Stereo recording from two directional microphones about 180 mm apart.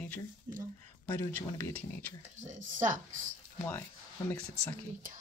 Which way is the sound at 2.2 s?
40° right (ahead or behind).